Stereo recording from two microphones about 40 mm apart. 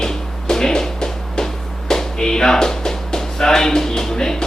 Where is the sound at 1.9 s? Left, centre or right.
Centre.